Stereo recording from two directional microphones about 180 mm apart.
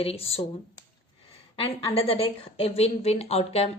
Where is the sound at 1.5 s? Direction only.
30° left (ahead or behind).